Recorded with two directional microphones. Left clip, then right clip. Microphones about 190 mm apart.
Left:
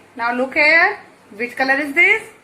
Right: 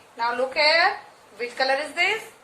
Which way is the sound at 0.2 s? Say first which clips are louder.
Left 5 dB; 35° left (ahead or behind).